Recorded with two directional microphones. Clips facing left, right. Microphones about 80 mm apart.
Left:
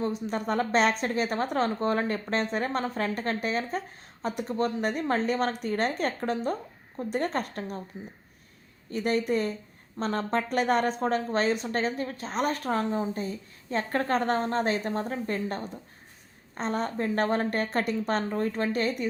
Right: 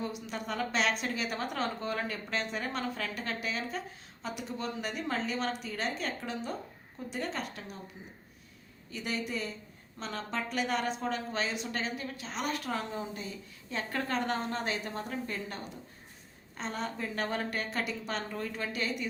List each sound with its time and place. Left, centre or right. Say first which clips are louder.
0.0 s a woman's voice: left 8 dB; left
8.9 s a woman's voice: left 10 dB; left